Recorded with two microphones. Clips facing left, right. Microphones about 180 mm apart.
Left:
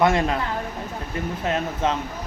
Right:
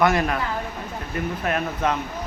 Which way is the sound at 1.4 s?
25° left (ahead or behind).